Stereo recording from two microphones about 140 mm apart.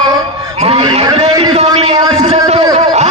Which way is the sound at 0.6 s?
50° right (ahead or behind).